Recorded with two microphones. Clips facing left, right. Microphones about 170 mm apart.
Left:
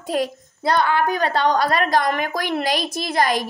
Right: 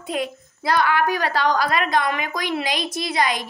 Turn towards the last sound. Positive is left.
turn(degrees=45)  # may be behind; listen again after turning